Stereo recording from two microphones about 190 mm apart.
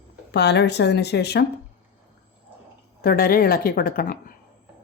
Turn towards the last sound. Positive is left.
turn(degrees=50)  # may be behind; listen again after turning